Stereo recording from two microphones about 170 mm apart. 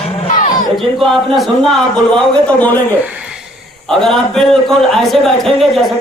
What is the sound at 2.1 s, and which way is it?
Speech, 10° left (ahead or behind).